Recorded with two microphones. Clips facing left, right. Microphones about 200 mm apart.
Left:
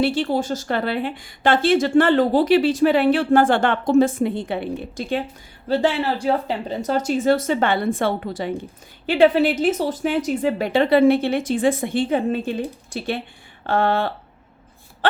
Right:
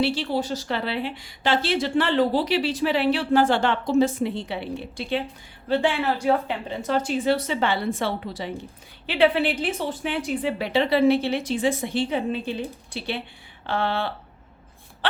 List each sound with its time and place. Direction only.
0.0 s a woman's voice: 50° left (ahead or behind)